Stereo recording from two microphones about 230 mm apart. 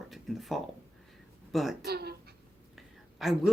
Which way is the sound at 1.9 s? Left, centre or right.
Right.